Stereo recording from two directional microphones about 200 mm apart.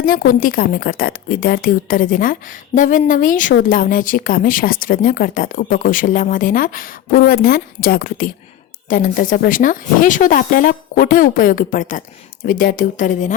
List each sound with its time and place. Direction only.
0.0 s speech: 45° left (ahead or behind)